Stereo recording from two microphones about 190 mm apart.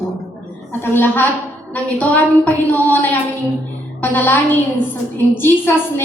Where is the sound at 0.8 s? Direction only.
10° left (ahead or behind).